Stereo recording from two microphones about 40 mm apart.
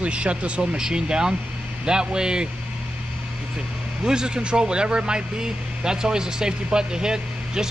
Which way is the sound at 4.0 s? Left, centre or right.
Centre.